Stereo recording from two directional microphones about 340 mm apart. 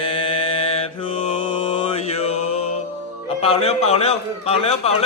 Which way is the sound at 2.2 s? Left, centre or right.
Centre.